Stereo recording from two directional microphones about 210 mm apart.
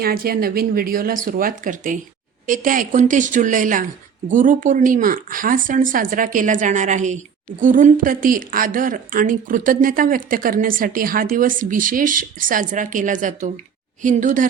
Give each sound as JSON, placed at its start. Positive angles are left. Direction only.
{"t": 0.0, "sound": "a woman's voice", "side_deg": -45}